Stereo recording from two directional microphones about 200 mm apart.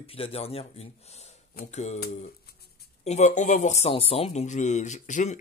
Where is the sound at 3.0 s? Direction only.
35° left (ahead or behind).